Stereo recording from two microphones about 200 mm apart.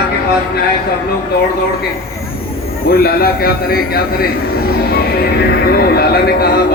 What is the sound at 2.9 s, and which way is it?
A man's voice, 50° left (ahead or behind).